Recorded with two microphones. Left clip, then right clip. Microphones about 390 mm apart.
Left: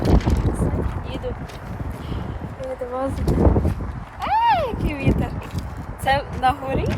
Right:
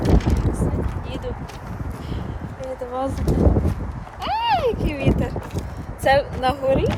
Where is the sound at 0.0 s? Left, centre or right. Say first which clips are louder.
Even; centre.